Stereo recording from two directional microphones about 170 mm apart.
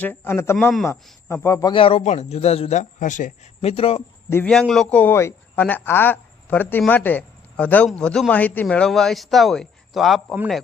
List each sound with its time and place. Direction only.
0.0 s a man's voice: 15° left (ahead or behind)
0.5 s speech: 5° left (ahead or behind)
1.3 s a man's voice: 15° left (ahead or behind)
1.7 s a man's voice: 35° left (ahead or behind)
4.4 s speech: centre (ahead or behind)